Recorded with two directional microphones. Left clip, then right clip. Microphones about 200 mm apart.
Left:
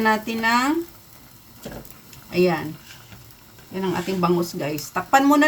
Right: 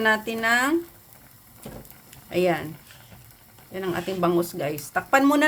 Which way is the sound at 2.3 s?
35° right (ahead or behind).